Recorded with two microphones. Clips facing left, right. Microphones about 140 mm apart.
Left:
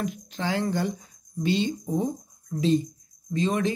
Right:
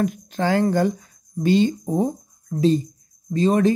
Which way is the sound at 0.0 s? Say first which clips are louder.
Right 8 dB; 50° right (ahead or behind).